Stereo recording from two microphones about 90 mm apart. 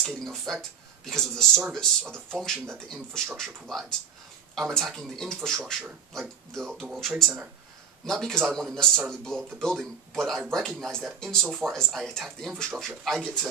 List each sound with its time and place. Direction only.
0.0 s speech: 5° left (ahead or behind)
6.9 s speech: 5° right (ahead or behind)